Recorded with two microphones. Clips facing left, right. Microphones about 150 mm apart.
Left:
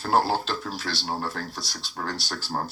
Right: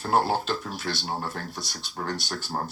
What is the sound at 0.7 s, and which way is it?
Speech, 35° left (ahead or behind).